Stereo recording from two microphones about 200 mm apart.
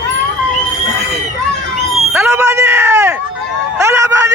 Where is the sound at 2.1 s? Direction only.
15° right (ahead or behind).